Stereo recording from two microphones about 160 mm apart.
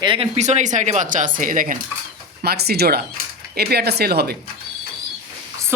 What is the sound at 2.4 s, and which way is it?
Speech, 80° right.